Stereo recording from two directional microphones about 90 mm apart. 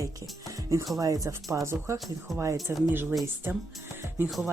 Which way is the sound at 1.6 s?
30° right (ahead or behind).